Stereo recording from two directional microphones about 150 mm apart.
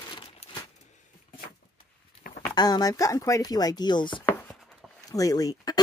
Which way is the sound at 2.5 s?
25° left (ahead or behind).